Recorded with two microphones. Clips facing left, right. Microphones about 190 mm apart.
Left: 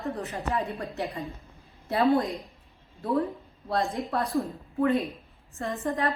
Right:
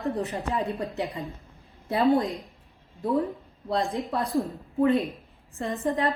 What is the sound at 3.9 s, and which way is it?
A woman's voice, centre (ahead or behind).